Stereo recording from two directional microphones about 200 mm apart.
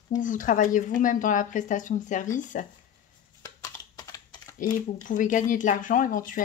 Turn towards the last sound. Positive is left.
turn(degrees=40)  # may be behind; listen again after turning